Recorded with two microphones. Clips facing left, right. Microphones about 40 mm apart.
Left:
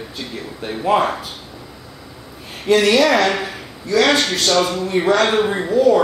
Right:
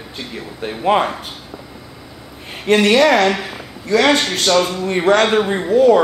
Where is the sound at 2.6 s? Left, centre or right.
Right.